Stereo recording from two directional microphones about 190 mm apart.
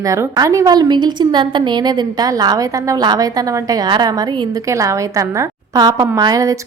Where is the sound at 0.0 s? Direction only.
15° right (ahead or behind).